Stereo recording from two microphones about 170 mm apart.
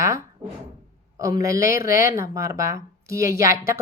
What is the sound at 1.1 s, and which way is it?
A man's voice, 20° right (ahead or behind).